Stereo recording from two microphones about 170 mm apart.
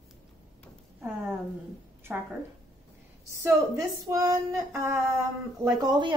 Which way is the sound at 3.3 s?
20° right (ahead or behind).